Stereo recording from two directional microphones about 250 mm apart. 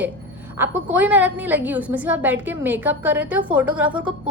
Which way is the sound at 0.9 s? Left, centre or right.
Centre.